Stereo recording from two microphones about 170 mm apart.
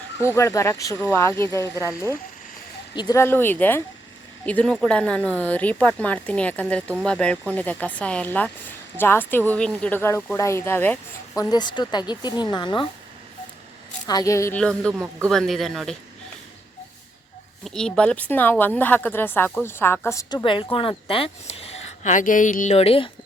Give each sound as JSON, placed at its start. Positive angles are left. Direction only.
{"t": 0.2, "sound": "a woman's voice", "side_deg": 15}
{"t": 1.8, "sound": "a man's voice", "side_deg": -5}
{"t": 2.9, "sound": "a woman's voice", "side_deg": 25}
{"t": 11.5, "sound": "speech", "side_deg": 25}
{"t": 14.1, "sound": "a woman's voice", "side_deg": 20}
{"t": 14.6, "sound": "a man's voice", "side_deg": 5}
{"t": 14.9, "sound": "a man's voice", "side_deg": -15}
{"t": 15.3, "sound": "a man's voice", "side_deg": 0}
{"t": 17.6, "sound": "a woman's voice", "side_deg": 5}
{"t": 20.4, "sound": "speech", "side_deg": 30}